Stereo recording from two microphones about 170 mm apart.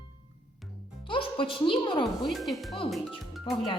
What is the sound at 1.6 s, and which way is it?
Speech, 30° left (ahead or behind).